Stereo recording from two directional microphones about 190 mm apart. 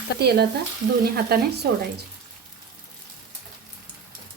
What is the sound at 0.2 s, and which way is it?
Speech, 60° right (ahead or behind).